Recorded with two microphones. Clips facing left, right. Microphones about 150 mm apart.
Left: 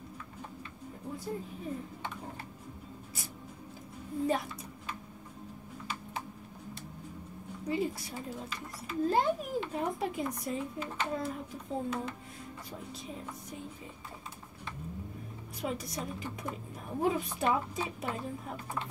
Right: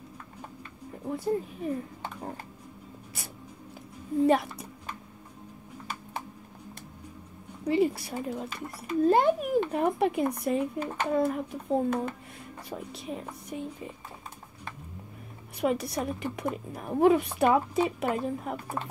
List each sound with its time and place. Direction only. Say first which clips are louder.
1.0 s speech: right 9 dB; 65° right (ahead or behind)
7.6 s a child's voice: right 8 dB; 70° right (ahead or behind)
15.6 s a woman's voice: right 9 dB; 70° right (ahead or behind)